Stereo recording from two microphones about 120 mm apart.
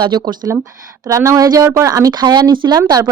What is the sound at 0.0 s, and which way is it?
Speech, 35° right (ahead or behind).